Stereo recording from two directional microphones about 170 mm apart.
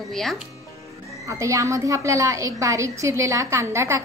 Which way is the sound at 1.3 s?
20° right (ahead or behind).